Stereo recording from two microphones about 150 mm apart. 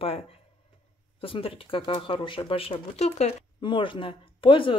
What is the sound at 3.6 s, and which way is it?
Speech, 35° left (ahead or behind).